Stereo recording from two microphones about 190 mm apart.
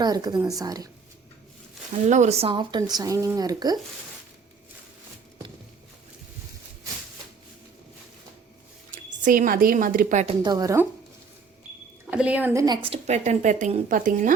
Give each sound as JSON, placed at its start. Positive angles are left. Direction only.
{"t": 0.0, "sound": "speech", "side_deg": -20}
{"t": 2.0, "sound": "speech", "side_deg": -40}
{"t": 9.2, "sound": "a woman's voice", "side_deg": -45}
{"t": 10.4, "sound": "speech", "side_deg": -20}
{"t": 12.1, "sound": "a woman's voice", "side_deg": -5}
{"t": 12.6, "sound": "speech", "side_deg": -25}